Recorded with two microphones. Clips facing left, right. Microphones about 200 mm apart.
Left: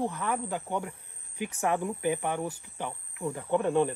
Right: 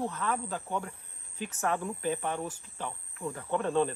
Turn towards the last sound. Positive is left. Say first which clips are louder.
# left 3 dB
turn(degrees=15)  # may be behind; listen again after turning